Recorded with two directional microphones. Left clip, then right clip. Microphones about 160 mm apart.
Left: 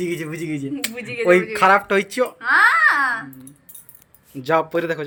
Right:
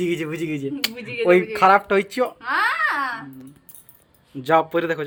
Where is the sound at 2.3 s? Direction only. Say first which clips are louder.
Left 10 dB; 20° right (ahead or behind).